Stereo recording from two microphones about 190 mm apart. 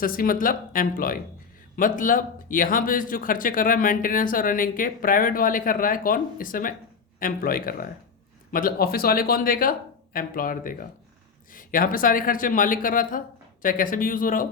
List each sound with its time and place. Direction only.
0.0 s speech: 50° left (ahead or behind)